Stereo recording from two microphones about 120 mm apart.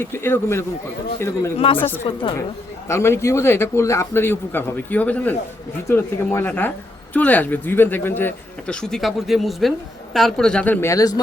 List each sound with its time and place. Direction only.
0.0 s a man's voice: 20° left (ahead or behind)
1.5 s a woman's voice: 50° left (ahead or behind)
2.9 s a man's voice: 20° left (ahead or behind)
8.7 s a woman's voice: 5° left (ahead or behind); by 11.1 s 25° left (ahead or behind)